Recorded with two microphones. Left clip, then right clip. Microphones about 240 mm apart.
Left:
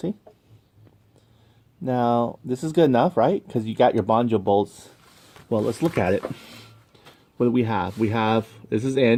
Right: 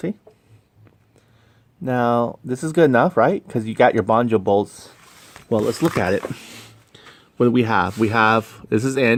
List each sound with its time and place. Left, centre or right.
1.8 s speech: centre